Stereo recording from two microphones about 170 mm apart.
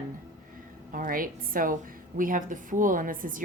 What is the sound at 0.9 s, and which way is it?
A woman's voice, 55° right (ahead or behind).